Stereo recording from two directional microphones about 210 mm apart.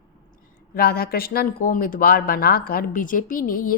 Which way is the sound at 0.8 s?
45° left (ahead or behind).